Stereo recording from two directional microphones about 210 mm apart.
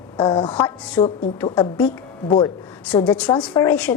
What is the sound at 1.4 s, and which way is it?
Speech, 20° left (ahead or behind).